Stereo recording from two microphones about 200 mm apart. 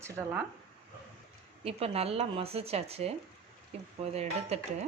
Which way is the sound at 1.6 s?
30° right (ahead or behind).